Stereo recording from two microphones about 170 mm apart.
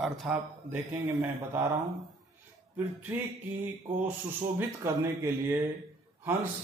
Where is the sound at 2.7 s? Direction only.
10° right (ahead or behind).